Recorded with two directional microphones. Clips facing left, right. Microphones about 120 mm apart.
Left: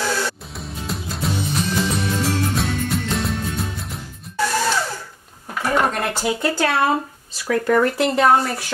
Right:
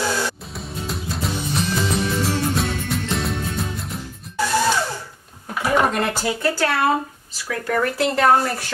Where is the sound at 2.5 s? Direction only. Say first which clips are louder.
Left 1 dB; centre (ahead or behind).